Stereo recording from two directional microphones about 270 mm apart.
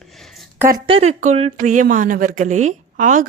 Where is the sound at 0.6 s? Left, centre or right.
Centre.